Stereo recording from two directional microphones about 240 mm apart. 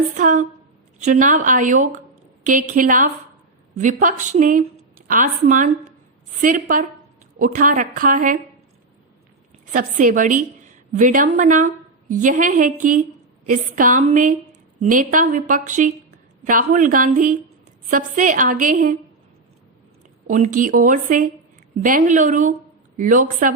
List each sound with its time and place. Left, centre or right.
0.1 s a woman's voice: right
9.7 s a woman's voice: right
20.2 s a woman's voice: right